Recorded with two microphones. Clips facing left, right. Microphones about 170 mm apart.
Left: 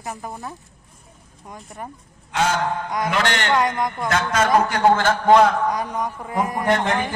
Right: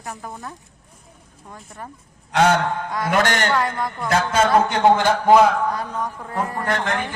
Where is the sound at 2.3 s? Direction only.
65° right (ahead or behind).